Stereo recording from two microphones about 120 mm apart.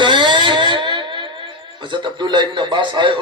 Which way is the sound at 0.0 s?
40° right (ahead or behind).